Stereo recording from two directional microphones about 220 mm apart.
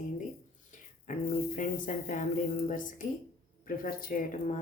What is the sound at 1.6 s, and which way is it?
Speech, 35° left (ahead or behind).